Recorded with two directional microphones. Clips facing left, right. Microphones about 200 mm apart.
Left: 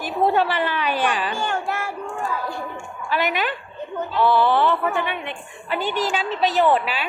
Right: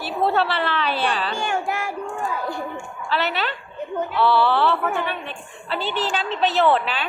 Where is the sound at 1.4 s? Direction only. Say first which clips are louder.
Right 1 dB; 15° right (ahead or behind).